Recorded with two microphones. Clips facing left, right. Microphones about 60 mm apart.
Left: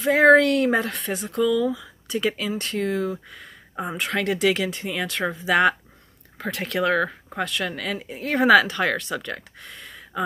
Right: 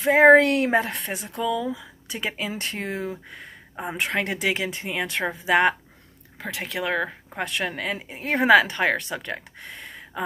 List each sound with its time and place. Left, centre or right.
0.0 s speech: right
6.3 s speech: centre
7.3 s speech: right